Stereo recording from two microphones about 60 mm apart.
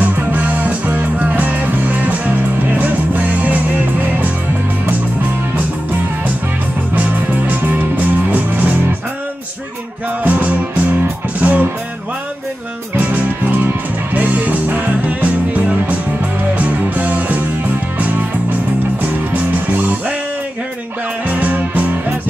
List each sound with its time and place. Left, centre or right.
0.0 s music: right
7.0 s music: right
10.2 s music: right
12.9 s music: right
18.9 s music: right
21.3 s music: right